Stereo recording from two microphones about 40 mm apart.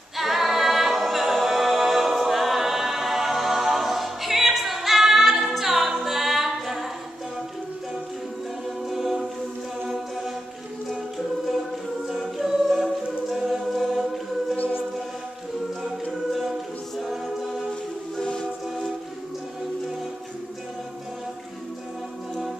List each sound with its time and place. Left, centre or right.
0.2 s a capella: centre
5.9 s music: centre
8.6 s music: centre
12.1 s choir: centre
16.1 s choir: centre
18.2 s music: left